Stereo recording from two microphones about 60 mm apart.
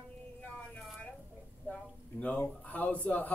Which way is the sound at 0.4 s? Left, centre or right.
Centre.